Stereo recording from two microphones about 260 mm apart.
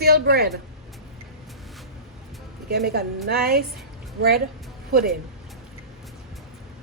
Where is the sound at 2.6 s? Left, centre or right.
Right.